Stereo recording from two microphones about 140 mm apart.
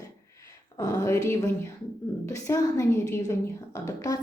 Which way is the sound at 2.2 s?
20° left (ahead or behind).